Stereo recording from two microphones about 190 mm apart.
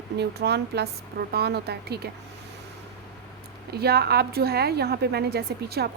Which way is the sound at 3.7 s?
55° right (ahead or behind).